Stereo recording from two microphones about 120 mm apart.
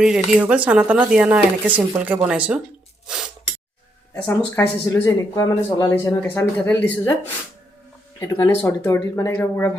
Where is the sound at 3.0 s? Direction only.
5° right (ahead or behind).